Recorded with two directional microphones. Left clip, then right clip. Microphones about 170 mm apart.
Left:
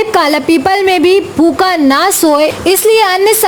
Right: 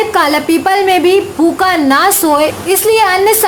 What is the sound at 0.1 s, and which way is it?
A woman's voice, 40° left (ahead or behind).